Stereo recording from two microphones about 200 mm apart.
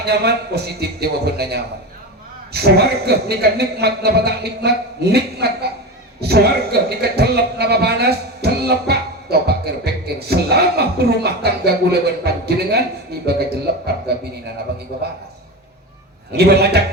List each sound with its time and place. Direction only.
0.0 s a man's voice: 55° right (ahead or behind)
16.3 s a man's voice: 55° right (ahead or behind)